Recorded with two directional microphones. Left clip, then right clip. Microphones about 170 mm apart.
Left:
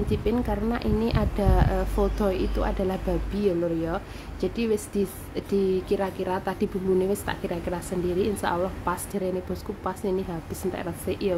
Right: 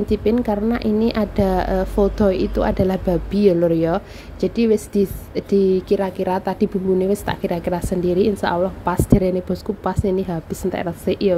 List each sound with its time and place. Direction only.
0.1 s a woman's voice: 25° right (ahead or behind)